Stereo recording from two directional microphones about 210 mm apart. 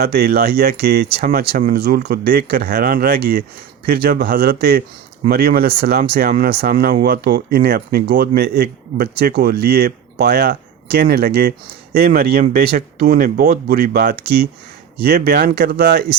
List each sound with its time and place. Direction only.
0.0 s speech: 50° right (ahead or behind)